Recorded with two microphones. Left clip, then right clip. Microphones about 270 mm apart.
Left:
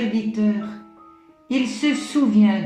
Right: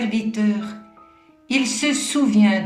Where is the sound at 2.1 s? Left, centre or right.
Right.